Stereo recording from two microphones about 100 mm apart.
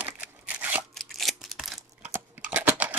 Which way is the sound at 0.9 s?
Centre (ahead or behind).